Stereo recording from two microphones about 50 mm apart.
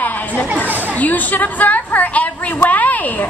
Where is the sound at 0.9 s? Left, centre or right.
Left.